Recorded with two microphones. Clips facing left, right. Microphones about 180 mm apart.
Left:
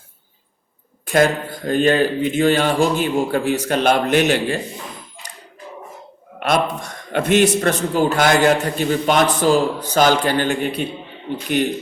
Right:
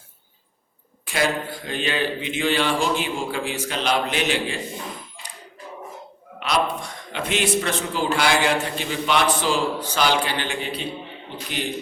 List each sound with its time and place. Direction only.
1.0 s speech: 45° left (ahead or behind)
6.4 s a man's voice: 50° left (ahead or behind)